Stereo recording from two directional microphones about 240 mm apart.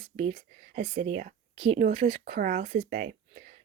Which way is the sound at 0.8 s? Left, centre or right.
Right.